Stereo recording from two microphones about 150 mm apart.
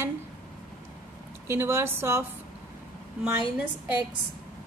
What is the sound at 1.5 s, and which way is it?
Speech, 15° right (ahead or behind).